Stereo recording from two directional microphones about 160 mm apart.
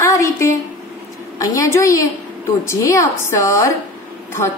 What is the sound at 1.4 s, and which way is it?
A woman's voice, 20° left (ahead or behind).